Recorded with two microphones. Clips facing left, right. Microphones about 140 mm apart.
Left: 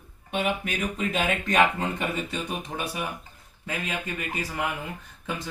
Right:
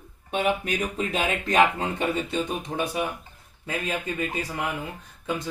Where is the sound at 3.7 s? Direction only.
25° right (ahead or behind).